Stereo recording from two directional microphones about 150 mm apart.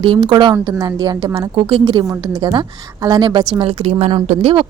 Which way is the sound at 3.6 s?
40° right (ahead or behind).